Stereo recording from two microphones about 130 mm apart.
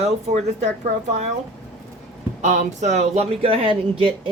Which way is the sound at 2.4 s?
60° right (ahead or behind).